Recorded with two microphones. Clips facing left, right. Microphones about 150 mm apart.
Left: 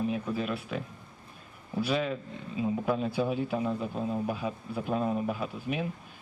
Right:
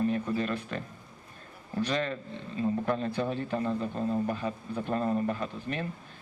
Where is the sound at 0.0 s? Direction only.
5° left (ahead or behind).